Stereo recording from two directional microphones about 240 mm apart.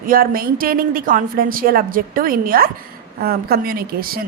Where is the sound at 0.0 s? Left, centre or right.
Right.